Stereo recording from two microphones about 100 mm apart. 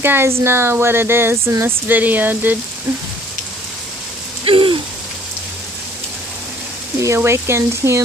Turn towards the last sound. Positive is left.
turn(degrees=-25)  # may be behind; listen again after turning